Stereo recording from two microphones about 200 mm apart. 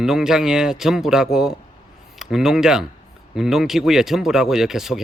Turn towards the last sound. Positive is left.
turn(degrees=0)  # may be behind; listen again after turning